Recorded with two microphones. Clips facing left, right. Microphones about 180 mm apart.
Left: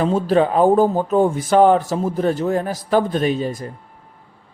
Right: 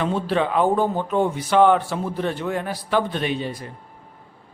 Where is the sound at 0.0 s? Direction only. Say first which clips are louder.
Left 6 dB; 40° left (ahead or behind).